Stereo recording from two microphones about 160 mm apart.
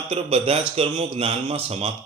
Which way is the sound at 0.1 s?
35° right (ahead or behind).